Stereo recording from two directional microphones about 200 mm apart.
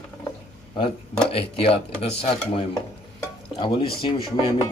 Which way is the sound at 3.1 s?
25° left (ahead or behind).